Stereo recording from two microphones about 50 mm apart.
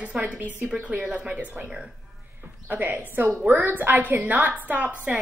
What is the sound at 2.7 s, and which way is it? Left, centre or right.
A woman's voice, right.